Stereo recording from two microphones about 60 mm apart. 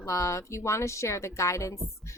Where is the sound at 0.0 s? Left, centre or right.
Left.